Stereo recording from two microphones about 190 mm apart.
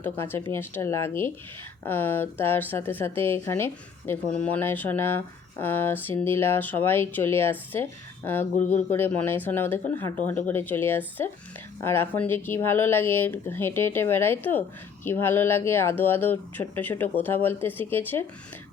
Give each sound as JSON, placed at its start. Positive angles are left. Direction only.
{"t": 0.0, "sound": "a woman's voice", "side_deg": 10}
{"t": 8.5, "sound": "speech", "side_deg": 40}
{"t": 8.9, "sound": "a woman's voice", "side_deg": 10}